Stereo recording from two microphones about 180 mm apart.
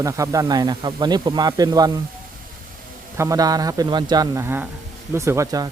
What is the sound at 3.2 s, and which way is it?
Speech, 20° right (ahead or behind).